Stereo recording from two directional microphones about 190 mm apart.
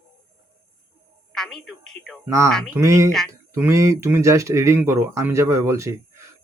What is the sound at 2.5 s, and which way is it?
Speech, centre (ahead or behind).